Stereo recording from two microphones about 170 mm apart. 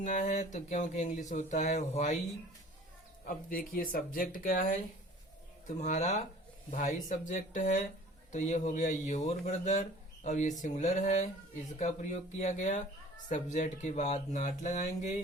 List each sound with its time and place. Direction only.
0.0 s speech: 50° left (ahead or behind)
3.2 s speech: 55° left (ahead or behind)